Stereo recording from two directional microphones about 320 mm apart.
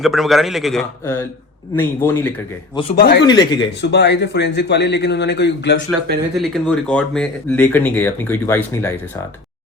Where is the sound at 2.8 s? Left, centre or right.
Centre.